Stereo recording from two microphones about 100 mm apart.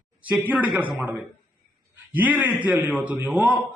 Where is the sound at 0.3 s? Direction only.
15° right (ahead or behind).